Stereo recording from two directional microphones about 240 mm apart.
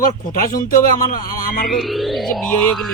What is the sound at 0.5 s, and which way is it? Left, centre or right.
Speech, left.